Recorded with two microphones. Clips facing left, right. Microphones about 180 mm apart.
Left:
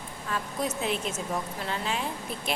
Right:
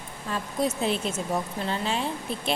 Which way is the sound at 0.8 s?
35° right (ahead or behind).